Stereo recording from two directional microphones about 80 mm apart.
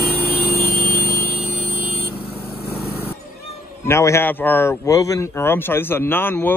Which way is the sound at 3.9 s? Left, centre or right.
Left.